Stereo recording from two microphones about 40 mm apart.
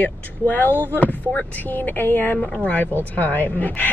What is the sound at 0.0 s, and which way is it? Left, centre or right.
A woman's voice, left.